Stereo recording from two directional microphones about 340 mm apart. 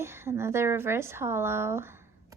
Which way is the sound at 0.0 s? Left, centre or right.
Centre.